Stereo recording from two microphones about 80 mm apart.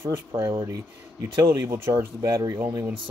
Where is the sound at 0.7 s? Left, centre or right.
Right.